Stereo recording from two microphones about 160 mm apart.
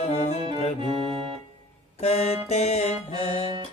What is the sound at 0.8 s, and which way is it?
Organ, 30° right (ahead or behind).